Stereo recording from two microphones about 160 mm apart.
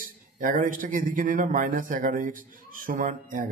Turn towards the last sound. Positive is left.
turn(degrees=-60)  # may be behind; listen again after turning